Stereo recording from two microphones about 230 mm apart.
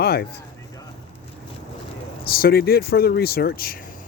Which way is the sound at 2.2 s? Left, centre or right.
Left.